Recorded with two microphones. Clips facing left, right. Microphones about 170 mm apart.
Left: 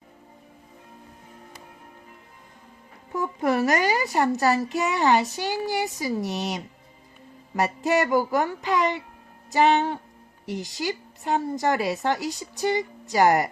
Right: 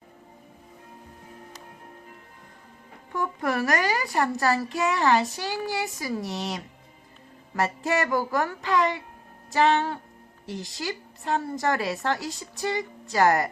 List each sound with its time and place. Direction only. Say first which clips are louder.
3.1 s a woman's voice: left 3 dB; 20° left (ahead or behind)